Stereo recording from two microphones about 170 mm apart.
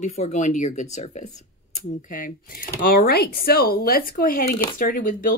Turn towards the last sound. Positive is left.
turn(degrees=55)  # may be behind; listen again after turning